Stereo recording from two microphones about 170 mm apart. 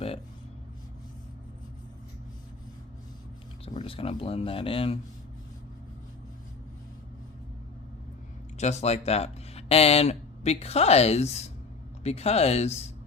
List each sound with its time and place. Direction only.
3.7 s speech: 30° left (ahead or behind)
8.5 s speech: 40° left (ahead or behind)